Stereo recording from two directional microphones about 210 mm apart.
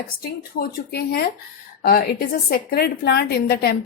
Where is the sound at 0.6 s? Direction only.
45° left (ahead or behind).